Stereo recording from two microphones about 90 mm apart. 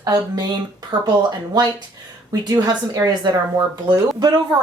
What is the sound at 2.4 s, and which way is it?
Speech, 45° right (ahead or behind).